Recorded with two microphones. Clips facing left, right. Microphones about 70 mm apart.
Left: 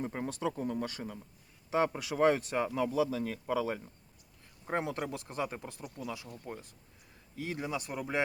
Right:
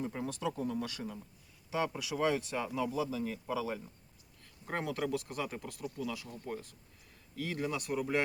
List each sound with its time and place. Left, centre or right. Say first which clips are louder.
0.0 s speech: left 2 dB; left
2.9 s speech: left 4 dB; left
4.6 s speech: left 1 dB; left